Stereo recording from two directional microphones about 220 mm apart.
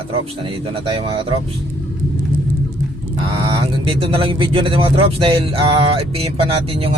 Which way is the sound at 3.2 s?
25° right (ahead or behind).